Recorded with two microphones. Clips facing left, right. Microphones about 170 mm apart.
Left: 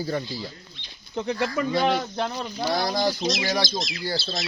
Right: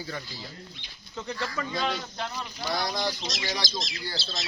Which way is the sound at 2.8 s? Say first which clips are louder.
Left 7 dB; 40° left (ahead or behind).